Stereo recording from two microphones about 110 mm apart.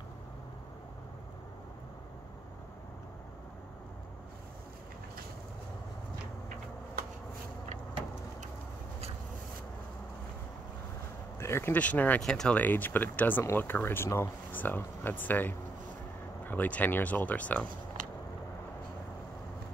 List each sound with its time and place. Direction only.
11.3 s speech: 25° left (ahead or behind)